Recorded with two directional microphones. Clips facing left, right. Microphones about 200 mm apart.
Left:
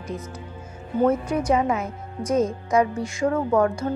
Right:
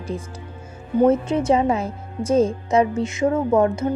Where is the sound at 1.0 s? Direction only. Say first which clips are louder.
Right 3 dB; 25° right (ahead or behind).